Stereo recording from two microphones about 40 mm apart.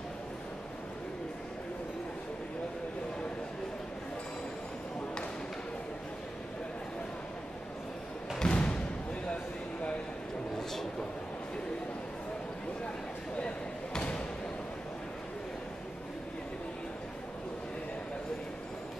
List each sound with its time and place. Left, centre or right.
8.4 s thump: left
13.9 s thump: left